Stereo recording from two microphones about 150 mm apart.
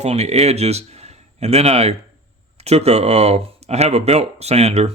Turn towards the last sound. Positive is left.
turn(degrees=-45)  # may be behind; listen again after turning